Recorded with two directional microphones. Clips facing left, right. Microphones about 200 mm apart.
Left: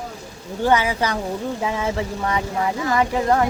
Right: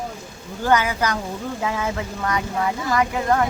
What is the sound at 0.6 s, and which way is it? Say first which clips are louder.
Speech: left 1 dB; 25° left (ahead or behind).